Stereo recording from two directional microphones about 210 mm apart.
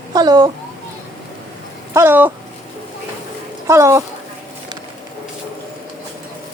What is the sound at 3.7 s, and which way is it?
Speech, 15° right (ahead or behind).